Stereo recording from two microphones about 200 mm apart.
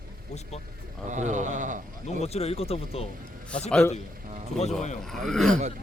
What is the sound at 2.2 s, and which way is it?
Speech, 30° left (ahead or behind).